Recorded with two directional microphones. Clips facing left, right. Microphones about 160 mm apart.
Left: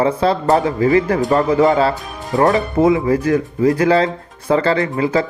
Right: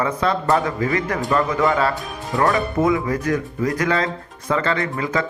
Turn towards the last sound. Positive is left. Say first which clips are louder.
# left 6 dB
turn(degrees=30)  # may be behind; listen again after turning